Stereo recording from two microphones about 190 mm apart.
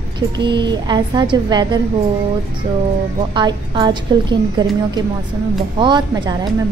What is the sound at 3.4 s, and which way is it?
A woman's voice, 25° right (ahead or behind).